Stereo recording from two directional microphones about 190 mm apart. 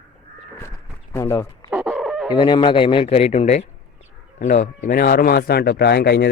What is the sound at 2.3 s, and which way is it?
Speech, 25° left (ahead or behind).